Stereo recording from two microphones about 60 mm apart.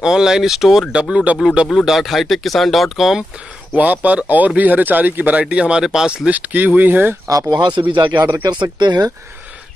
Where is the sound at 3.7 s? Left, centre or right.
Right.